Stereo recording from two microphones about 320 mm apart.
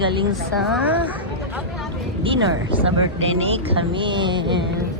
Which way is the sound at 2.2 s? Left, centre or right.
Centre.